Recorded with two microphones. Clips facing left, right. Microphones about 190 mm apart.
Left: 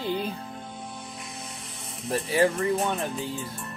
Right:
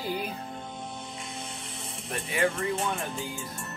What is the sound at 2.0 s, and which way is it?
Speech, 30° left (ahead or behind).